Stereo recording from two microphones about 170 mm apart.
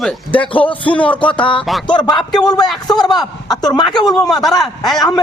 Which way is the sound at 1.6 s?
Centre (ahead or behind).